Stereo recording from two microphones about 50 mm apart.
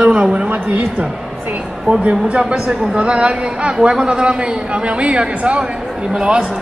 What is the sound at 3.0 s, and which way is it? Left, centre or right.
A man's voice, right.